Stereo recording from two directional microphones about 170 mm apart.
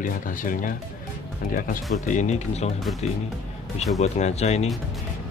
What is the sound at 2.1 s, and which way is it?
Speech, 45° left (ahead or behind).